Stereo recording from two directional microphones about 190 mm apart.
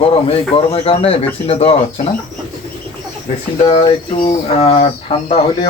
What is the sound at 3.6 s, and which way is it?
Speech, 30° left (ahead or behind).